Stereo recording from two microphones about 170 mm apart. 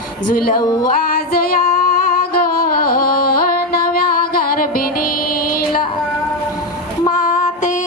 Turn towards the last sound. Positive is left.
turn(degrees=45)  # may be behind; listen again after turning